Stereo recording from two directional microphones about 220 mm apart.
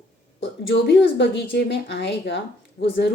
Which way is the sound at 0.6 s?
55° left (ahead or behind).